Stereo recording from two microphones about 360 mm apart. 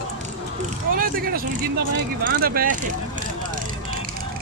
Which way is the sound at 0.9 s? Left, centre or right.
Right.